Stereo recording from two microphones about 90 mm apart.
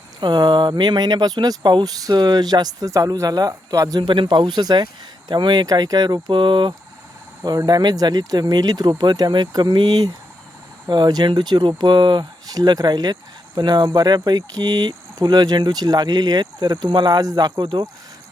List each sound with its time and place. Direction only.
0.2 s speech: 55° right (ahead or behind)
4.0 s speech: 65° right (ahead or behind)
7.4 s speech: 45° right (ahead or behind)
17.6 s speech: 65° right (ahead or behind)